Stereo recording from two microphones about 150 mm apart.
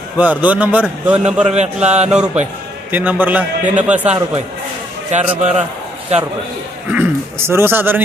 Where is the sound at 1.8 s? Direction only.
45° right (ahead or behind).